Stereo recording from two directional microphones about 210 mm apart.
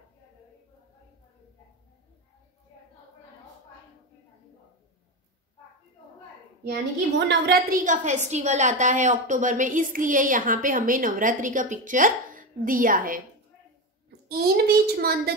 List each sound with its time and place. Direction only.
6.7 s a woman's voice: 55° right (ahead or behind)
14.7 s a woman's voice: 45° right (ahead or behind)